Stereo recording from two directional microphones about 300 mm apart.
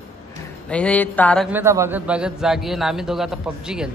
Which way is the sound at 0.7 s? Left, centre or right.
Centre.